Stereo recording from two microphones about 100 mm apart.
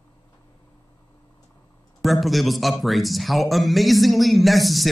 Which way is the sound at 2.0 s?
Centre (ahead or behind).